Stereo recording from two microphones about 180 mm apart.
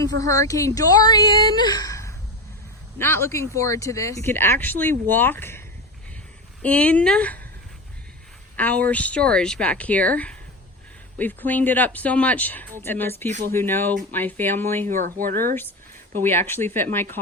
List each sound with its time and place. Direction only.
0.0 s speech: 20° left (ahead or behind)
8.5 s speech: 10° left (ahead or behind)
14.8 s speech: 45° right (ahead or behind)
16.2 s speech: 15° left (ahead or behind)